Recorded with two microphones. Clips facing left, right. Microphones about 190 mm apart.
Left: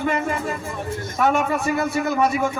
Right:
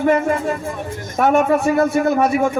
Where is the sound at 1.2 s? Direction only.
50° right (ahead or behind).